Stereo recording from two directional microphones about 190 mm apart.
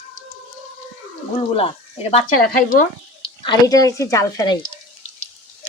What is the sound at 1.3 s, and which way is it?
Speech, 30° left (ahead or behind).